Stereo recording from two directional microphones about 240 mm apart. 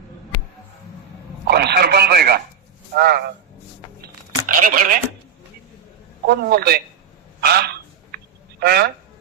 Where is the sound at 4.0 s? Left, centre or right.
Right.